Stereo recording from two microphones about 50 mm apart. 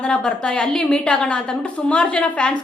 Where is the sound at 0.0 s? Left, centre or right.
Centre.